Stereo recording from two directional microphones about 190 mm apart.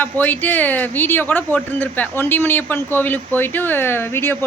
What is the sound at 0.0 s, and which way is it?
Speech, 10° left (ahead or behind).